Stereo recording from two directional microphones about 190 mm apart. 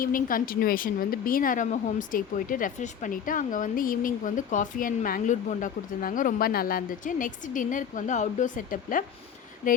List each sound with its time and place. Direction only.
0.0 s a woman's voice: 50° left (ahead or behind)